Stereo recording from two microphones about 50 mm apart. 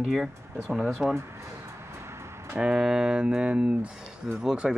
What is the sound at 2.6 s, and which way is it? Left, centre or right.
Speech, centre.